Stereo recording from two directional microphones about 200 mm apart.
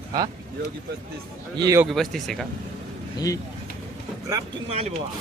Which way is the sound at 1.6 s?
15° right (ahead or behind).